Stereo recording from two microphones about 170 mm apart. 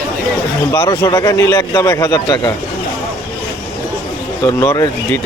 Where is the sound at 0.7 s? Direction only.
20° left (ahead or behind).